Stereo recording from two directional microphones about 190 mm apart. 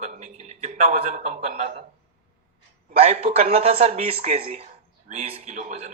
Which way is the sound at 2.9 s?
35° right (ahead or behind).